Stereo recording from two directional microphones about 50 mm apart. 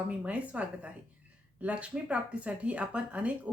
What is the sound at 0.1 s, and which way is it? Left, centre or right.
Speech, right.